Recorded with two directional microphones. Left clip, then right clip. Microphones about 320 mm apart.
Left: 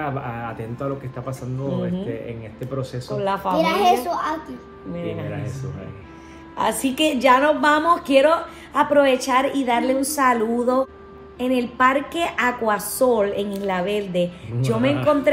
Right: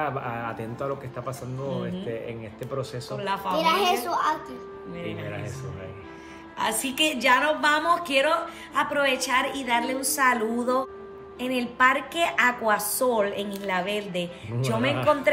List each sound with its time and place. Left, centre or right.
0.0 s a man's voice: centre
3.2 s a woman's voice: centre
4.9 s a woman's voice: centre
6.6 s a woman's voice: centre